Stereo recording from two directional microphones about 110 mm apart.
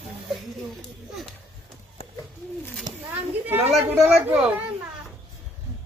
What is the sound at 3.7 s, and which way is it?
Speech, centre (ahead or behind).